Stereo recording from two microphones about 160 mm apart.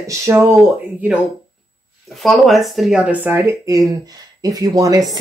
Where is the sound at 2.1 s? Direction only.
Centre (ahead or behind).